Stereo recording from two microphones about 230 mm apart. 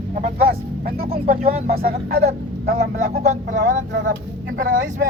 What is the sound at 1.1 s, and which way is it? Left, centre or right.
Speech, right.